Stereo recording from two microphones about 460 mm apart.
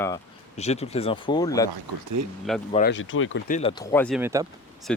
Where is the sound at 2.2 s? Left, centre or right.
Right.